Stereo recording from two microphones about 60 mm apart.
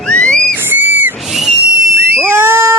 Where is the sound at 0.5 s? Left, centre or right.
Right.